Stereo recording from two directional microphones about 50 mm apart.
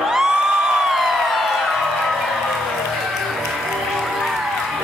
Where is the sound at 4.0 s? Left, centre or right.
Centre.